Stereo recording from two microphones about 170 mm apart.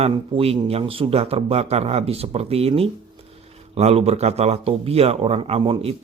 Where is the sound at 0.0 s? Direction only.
35° right (ahead or behind).